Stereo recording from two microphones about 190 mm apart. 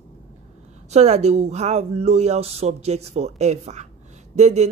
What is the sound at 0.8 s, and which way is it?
Speech, 35° right (ahead or behind).